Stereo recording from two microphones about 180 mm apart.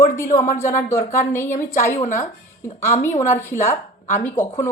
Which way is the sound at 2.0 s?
45° left (ahead or behind).